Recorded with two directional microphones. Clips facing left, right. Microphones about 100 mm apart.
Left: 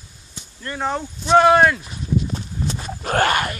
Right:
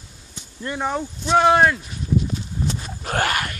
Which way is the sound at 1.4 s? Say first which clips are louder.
Left 2 dB; 20° right (ahead or behind).